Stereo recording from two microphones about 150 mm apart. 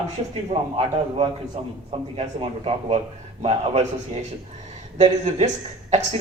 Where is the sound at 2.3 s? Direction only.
40° right (ahead or behind).